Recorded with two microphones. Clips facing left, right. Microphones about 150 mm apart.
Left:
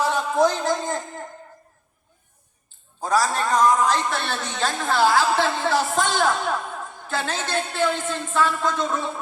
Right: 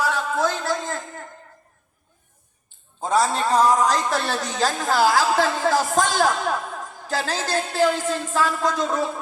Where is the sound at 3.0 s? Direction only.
25° right (ahead or behind).